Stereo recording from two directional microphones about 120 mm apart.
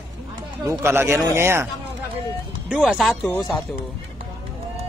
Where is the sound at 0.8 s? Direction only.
20° right (ahead or behind).